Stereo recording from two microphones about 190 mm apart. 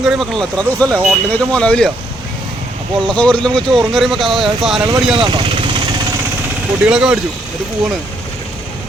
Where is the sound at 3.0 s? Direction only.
5° left (ahead or behind).